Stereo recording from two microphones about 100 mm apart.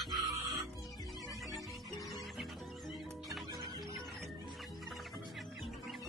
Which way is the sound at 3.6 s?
45° right (ahead or behind).